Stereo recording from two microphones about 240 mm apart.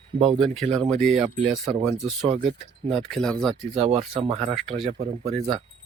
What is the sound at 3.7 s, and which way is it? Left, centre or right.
Speech, right.